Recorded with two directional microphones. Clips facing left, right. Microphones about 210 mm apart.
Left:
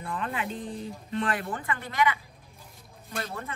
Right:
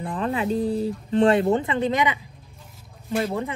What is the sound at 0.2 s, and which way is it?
Speech, 35° right (ahead or behind).